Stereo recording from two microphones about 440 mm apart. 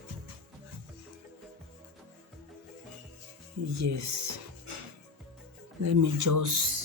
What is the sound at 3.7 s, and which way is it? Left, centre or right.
Speech, right.